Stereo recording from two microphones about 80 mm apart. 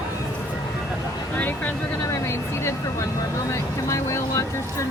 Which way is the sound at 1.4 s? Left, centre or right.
Left.